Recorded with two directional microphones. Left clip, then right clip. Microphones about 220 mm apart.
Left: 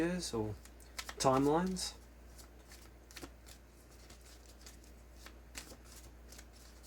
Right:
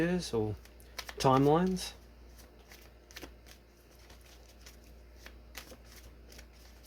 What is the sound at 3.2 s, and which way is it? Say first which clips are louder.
Shuffling cards: right 3 dB; 5° right (ahead or behind).